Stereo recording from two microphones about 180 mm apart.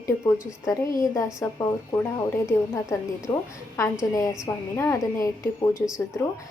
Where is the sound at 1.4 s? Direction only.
15° left (ahead or behind).